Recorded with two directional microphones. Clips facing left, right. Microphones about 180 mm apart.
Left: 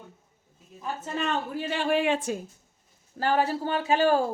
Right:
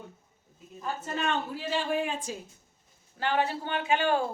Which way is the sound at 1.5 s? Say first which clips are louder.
Left 3 dB; 60° left (ahead or behind).